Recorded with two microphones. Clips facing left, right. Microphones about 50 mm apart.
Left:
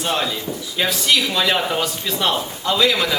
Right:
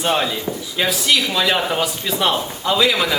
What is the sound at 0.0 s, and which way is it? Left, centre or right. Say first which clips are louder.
Speech: right 3 dB; centre.